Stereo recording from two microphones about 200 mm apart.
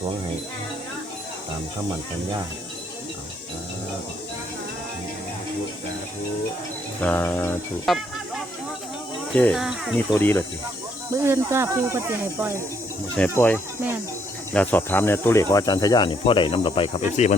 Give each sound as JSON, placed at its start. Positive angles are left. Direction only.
{"t": 7.0, "sound": "music", "side_deg": 10}
{"t": 7.9, "sound": "speech", "side_deg": 0}
{"t": 9.3, "sound": "speech", "side_deg": 5}
{"t": 10.2, "sound": "music", "side_deg": 10}
{"t": 11.2, "sound": "speech", "side_deg": -10}
{"t": 13.1, "sound": "music", "side_deg": 10}
{"t": 14.5, "sound": "speech", "side_deg": 5}